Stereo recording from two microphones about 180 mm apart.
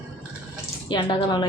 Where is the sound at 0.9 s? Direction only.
25° left (ahead or behind).